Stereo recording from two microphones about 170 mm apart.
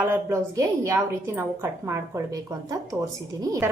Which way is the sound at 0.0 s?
15° right (ahead or behind).